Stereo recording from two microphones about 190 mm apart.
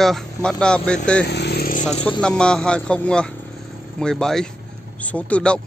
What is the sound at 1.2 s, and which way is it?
Motorcycle, 60° left (ahead or behind).